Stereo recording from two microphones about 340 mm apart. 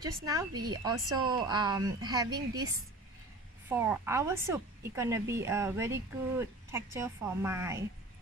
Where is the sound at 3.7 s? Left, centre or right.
Centre.